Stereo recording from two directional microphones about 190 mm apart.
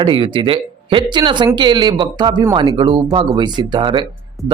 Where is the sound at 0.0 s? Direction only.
25° right (ahead or behind).